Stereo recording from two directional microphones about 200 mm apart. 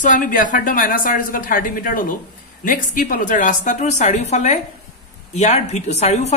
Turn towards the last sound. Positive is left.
turn(degrees=35)  # may be behind; listen again after turning